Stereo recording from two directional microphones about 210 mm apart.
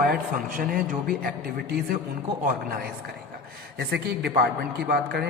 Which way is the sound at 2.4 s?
45° right (ahead or behind).